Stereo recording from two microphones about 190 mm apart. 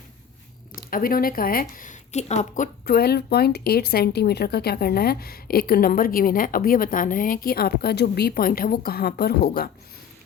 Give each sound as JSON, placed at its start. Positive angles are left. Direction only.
{"t": 0.8, "sound": "speech", "side_deg": 50}
{"t": 2.8, "sound": "speech", "side_deg": 55}